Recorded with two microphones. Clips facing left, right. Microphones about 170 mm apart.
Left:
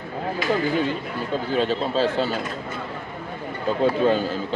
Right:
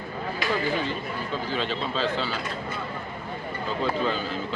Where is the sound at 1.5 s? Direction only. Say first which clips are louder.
Left 8 dB; 45° left (ahead or behind).